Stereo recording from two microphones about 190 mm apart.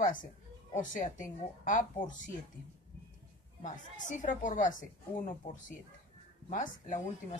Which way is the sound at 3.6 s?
40° left (ahead or behind).